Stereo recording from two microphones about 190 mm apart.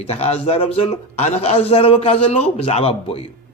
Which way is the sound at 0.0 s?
30° left (ahead or behind).